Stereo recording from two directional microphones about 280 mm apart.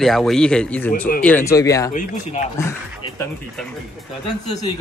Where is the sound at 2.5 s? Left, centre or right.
Centre.